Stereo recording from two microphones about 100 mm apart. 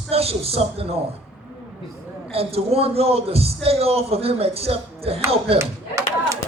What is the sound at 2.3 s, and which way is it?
A man's voice, 80° right.